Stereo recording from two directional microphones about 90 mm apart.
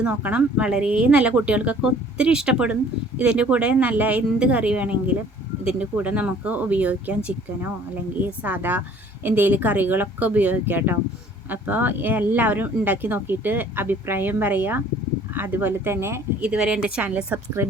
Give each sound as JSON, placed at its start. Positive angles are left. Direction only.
{"t": 0.0, "sound": "speech", "side_deg": -10}
{"t": 8.2, "sound": "speech", "side_deg": -20}
{"t": 16.4, "sound": "speech", "side_deg": -10}